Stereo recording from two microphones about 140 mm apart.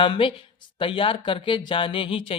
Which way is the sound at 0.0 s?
35° left (ahead or behind).